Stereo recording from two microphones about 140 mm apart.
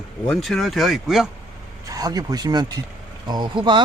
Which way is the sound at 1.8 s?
25° right (ahead or behind).